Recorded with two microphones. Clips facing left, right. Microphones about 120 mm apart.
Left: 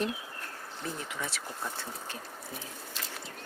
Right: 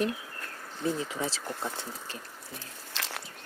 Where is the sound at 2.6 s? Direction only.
90° right.